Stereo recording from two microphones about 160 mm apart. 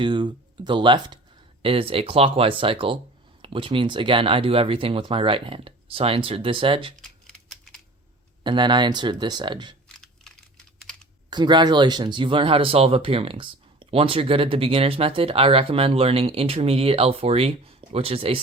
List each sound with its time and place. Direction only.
0.0 s speech: 30° right (ahead or behind)
6.9 s typing: 5° left (ahead or behind)
8.4 s speech: 30° right (ahead or behind)
10.0 s typing: 5° left (ahead or behind)
11.3 s speech: 25° right (ahead or behind)